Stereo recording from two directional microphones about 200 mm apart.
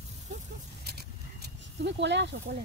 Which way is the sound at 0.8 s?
55° right (ahead or behind).